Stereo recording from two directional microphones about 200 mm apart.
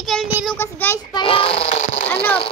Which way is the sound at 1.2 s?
30° left (ahead or behind).